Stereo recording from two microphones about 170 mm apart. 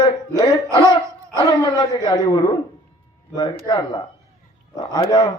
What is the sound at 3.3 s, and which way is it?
Speech, 25° left (ahead or behind).